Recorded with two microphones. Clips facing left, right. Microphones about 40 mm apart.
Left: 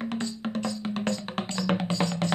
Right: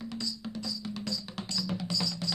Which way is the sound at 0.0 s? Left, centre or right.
Left.